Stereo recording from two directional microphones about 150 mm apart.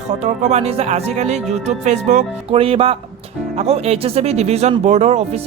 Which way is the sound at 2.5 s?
40° right (ahead or behind).